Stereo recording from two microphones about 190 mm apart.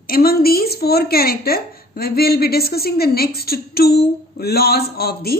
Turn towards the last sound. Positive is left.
turn(degrees=55)  # may be behind; listen again after turning